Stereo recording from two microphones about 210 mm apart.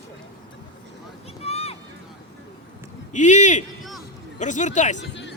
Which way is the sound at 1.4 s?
30° left (ahead or behind).